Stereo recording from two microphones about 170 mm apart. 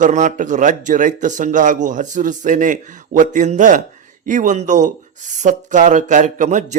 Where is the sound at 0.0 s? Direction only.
45° right (ahead or behind).